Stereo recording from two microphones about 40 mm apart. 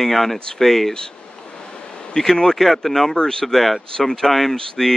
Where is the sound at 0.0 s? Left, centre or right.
Centre.